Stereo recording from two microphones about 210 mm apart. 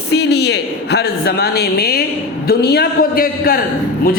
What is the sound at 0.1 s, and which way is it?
A woman's voice, 50° left (ahead or behind).